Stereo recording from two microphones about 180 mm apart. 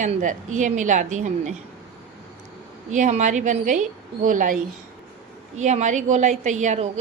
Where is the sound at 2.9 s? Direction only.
40° right (ahead or behind).